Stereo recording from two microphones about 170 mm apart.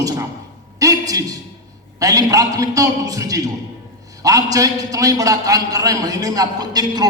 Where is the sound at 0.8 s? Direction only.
20° right (ahead or behind).